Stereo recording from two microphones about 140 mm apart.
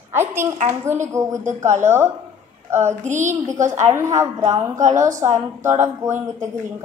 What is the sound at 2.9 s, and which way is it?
Speech, 60° right (ahead or behind).